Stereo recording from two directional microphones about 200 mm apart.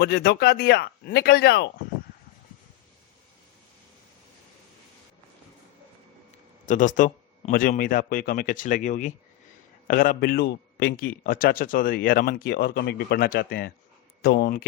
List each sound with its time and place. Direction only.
0.0 s a man's voice: 55° left (ahead or behind)
6.7 s a man's voice: 40° left (ahead or behind)